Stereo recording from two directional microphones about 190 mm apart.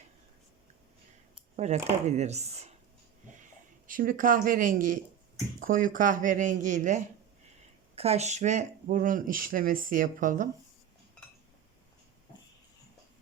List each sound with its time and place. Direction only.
1.5 s speech: 35° right (ahead or behind)
3.4 s speech: 45° right (ahead or behind)